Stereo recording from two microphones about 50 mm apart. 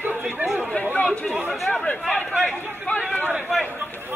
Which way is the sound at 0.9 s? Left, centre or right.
Left.